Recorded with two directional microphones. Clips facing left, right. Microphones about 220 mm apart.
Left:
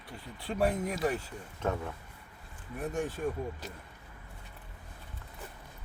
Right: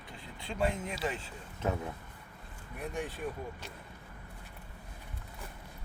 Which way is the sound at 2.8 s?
45° left (ahead or behind).